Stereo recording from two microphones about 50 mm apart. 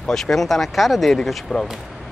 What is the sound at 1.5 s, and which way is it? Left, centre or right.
Speech, centre.